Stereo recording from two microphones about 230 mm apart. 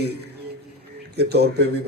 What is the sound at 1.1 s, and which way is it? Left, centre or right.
Speech, right.